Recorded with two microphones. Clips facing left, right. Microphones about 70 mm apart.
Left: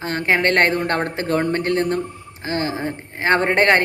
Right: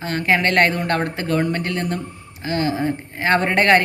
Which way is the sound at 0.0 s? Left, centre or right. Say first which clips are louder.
Even; left.